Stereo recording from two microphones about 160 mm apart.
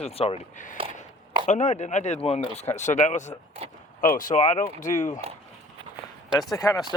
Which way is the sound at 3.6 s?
35° right (ahead or behind).